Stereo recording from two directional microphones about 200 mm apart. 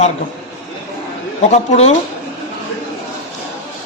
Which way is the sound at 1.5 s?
35° left (ahead or behind).